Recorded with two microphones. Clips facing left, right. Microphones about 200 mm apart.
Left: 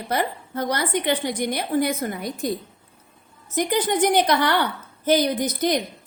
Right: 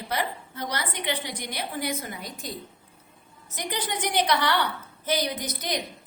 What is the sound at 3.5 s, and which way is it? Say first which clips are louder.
A woman's voice: left 10 dB; 50° left (ahead or behind).